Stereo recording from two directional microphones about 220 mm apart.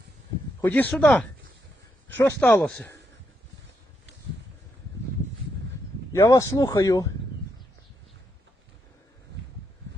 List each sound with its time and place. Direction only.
0.6 s speech: 5° left (ahead or behind)
6.1 s speech: 15° left (ahead or behind)